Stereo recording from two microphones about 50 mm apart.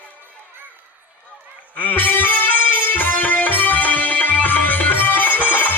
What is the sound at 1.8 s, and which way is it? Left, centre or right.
Music, left.